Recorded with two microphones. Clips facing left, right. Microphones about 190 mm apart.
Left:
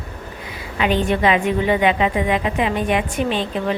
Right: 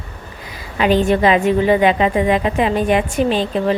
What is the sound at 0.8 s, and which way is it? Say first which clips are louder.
A woman's voice: right 4 dB; 35° right (ahead or behind).